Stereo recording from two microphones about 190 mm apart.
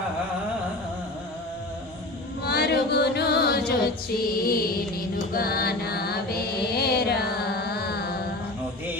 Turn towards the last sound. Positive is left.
turn(degrees=55)  # may be behind; listen again after turning